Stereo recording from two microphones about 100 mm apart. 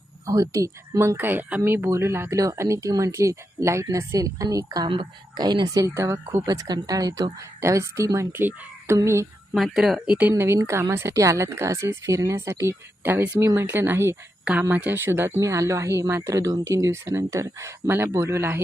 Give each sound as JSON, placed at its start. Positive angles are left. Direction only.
{"t": 0.3, "sound": "a woman's voice", "side_deg": -35}
{"t": 5.8, "sound": "a woman's voice", "side_deg": -30}
{"t": 6.5, "sound": "speech", "side_deg": -40}
{"t": 8.3, "sound": "a woman's voice", "side_deg": -20}
{"t": 9.6, "sound": "speech", "side_deg": 0}
{"t": 10.2, "sound": "a woman's voice", "side_deg": -25}